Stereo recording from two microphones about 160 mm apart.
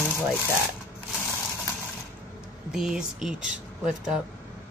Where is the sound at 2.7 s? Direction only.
5° right (ahead or behind).